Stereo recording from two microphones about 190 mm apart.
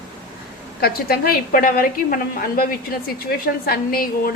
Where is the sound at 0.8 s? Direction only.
50° left (ahead or behind).